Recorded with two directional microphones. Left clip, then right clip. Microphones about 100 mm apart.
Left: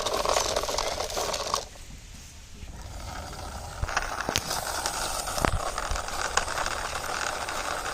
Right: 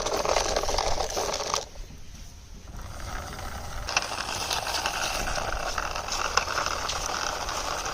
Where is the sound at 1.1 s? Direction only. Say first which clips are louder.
Right 1 dB; 40° right (ahead or behind).